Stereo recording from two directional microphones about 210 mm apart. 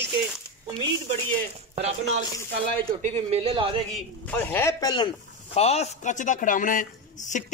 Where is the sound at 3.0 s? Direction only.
30° right (ahead or behind).